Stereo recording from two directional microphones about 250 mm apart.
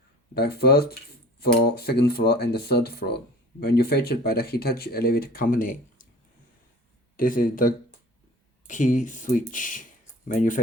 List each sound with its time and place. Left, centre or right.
0.3 s speech: left
7.2 s speech: left